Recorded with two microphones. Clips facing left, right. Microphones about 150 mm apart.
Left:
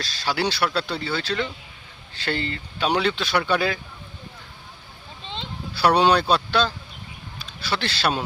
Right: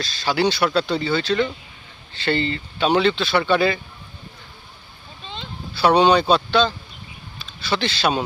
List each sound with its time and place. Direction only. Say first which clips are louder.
0.0 s speech: right 5 dB; 5° left (ahead or behind)
5.2 s a sound: even; 20° left (ahead or behind)
5.8 s speech: right 3 dB; 5° left (ahead or behind)